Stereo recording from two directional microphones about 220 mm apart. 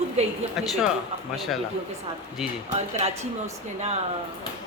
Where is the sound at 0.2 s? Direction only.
30° right (ahead or behind).